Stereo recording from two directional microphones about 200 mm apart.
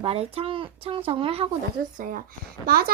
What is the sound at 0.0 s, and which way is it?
Speech, 30° right (ahead or behind).